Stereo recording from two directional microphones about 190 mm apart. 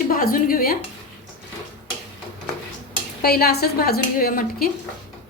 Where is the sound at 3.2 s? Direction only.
55° left (ahead or behind).